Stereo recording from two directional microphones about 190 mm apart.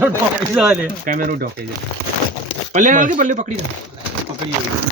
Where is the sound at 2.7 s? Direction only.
40° right (ahead or behind).